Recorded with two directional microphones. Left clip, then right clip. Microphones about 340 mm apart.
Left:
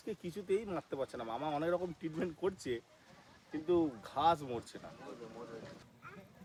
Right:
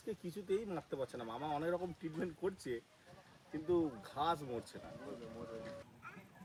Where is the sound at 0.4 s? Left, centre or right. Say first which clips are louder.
Left 3 dB; centre.